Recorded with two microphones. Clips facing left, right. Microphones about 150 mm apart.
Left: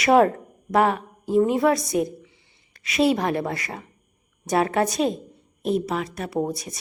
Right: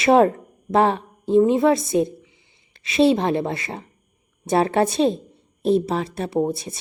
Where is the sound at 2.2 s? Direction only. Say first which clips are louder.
Left 2 dB; 20° right (ahead or behind).